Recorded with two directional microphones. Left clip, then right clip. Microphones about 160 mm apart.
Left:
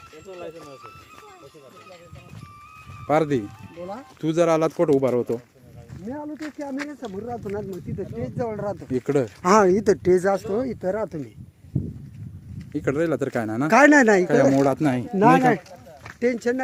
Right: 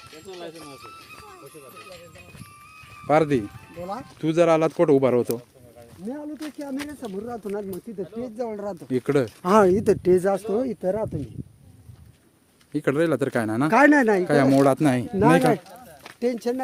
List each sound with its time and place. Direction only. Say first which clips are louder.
0.3 s speech: left 1 dB; 85° right
3.1 s speech: right 1 dB; 5° right (ahead or behind)
3.4 s speech: right 1 dB; 75° right (ahead or behind)
4.2 s speech: right 1 dB; centre (ahead or behind)
6.7 s speech: left 1 dB; centre (ahead or behind)
7.9 s speech: left 2 dB; 20° left (ahead or behind)
8.9 s speech: right 1 dB; 5° left (ahead or behind); by 10.4 s 10° right (ahead or behind)
10.5 s speech: right 1 dB; 25° right (ahead or behind)
12.7 s speech: right 1 dB; 5° right (ahead or behind)
13.7 s speech: left 3 dB; 90° left
14.3 s speech: even; 5° right (ahead or behind)
15.2 s speech: left 2 dB; 80° left
16.2 s speech: left 2 dB; 35° left (ahead or behind)